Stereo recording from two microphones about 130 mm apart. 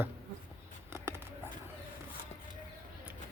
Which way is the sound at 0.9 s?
20° right (ahead or behind).